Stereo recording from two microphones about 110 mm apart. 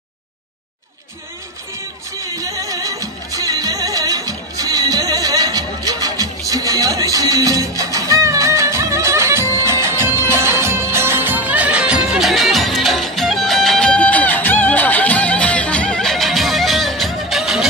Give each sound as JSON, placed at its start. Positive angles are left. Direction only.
{"t": 2.2, "sound": "music", "side_deg": -30}